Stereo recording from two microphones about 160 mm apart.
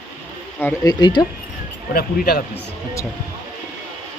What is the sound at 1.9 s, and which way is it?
Speech, 70° left (ahead or behind).